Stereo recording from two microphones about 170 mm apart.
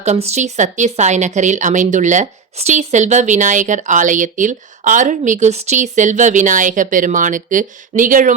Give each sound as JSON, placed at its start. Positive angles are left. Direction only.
{"t": 0.0, "sound": "a woman's voice", "side_deg": -40}